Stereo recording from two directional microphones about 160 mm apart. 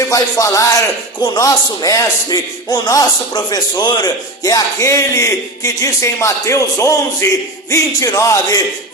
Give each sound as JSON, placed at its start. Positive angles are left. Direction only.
{"t": 0.1, "sound": "a man's voice", "side_deg": 20}